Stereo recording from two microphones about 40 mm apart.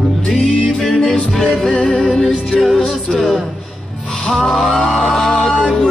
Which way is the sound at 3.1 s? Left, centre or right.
Centre.